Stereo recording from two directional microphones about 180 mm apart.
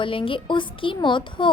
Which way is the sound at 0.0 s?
30° left (ahead or behind).